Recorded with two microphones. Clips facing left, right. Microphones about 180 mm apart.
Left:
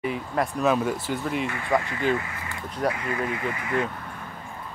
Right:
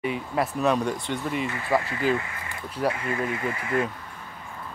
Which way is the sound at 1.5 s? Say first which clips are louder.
Even; 25° right (ahead or behind).